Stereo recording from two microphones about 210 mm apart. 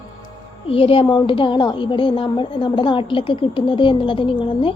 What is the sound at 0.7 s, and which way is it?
A woman's voice, 25° left (ahead or behind).